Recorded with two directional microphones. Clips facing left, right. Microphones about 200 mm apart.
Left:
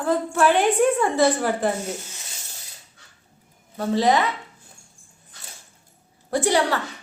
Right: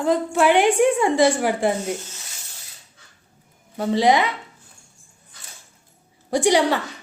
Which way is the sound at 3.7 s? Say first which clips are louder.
Right 2 dB; 15° right (ahead or behind).